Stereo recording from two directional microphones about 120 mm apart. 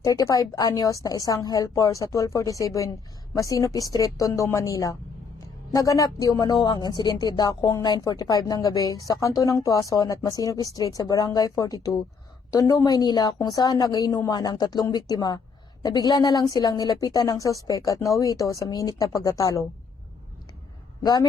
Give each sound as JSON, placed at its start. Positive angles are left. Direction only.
{"t": 0.0, "sound": "a woman's voice", "side_deg": 30}
{"t": 21.0, "sound": "speech", "side_deg": 35}